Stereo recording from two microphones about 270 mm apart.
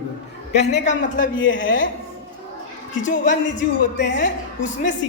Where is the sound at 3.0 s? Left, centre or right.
Left.